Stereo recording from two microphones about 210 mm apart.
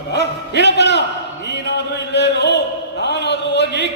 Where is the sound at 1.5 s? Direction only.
55° left (ahead or behind).